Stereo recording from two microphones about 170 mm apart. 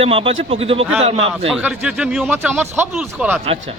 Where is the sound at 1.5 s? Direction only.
5° right (ahead or behind).